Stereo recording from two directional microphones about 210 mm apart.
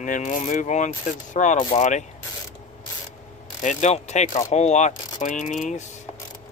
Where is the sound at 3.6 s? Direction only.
35° left (ahead or behind).